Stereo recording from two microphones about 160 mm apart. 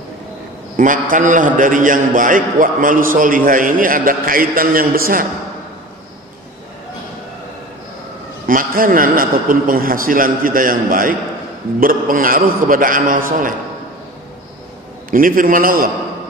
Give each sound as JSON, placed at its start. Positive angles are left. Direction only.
{"t": 0.7, "sound": "a man's voice", "side_deg": -55}
{"t": 8.5, "sound": "a man's voice", "side_deg": -60}
{"t": 15.0, "sound": "a man's voice", "side_deg": -60}